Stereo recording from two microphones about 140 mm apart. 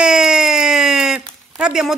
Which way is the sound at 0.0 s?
5° right (ahead or behind).